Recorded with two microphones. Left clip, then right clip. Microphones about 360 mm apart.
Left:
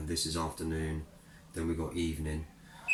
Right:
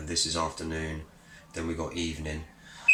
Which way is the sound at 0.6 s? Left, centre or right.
Right.